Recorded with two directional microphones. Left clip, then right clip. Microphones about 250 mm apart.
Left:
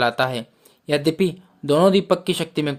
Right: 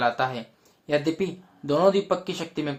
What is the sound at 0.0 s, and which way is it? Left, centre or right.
Speech, left.